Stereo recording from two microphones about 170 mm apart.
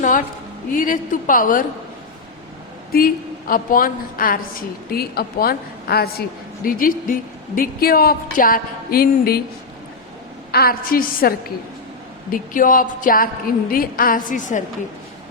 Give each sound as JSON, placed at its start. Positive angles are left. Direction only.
{"t": 0.7, "sound": "a woman's voice", "side_deg": 55}
{"t": 2.9, "sound": "speech", "side_deg": 55}
{"t": 6.7, "sound": "speech", "side_deg": 55}
{"t": 10.5, "sound": "speech", "side_deg": 65}